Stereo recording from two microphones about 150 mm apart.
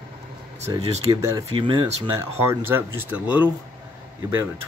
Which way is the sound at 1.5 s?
40° right (ahead or behind).